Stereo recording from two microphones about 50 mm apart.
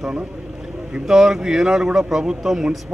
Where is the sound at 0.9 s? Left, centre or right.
Centre.